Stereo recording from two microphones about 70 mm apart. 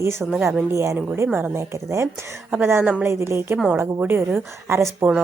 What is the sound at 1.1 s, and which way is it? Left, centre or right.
A woman's voice, right.